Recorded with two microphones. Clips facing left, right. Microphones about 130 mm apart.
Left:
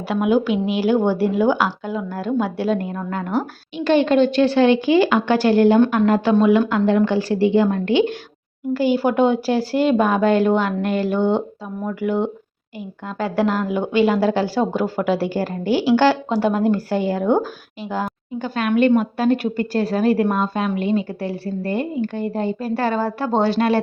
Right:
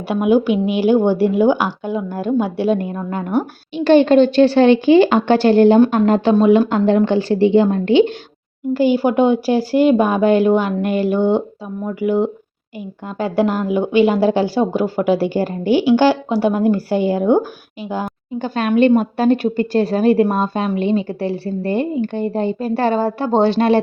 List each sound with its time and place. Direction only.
0.1 s speech: 15° right (ahead or behind)
3.8 s a woman's voice: 35° right (ahead or behind); by 18.1 s 15° right (ahead or behind)
18.3 s a woman's voice: 30° right (ahead or behind)